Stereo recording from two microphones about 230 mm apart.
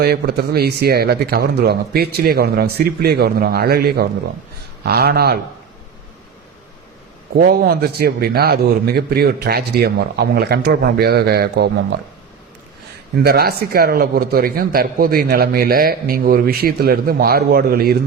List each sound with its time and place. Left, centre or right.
0.0 s a man's voice: right
7.3 s a man's voice: right
13.2 s a man's voice: right